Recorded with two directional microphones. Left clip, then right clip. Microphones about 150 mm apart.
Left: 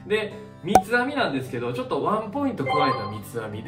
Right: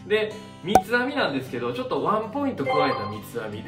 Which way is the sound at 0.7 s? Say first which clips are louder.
Left 1 dB; 5° left (ahead or behind).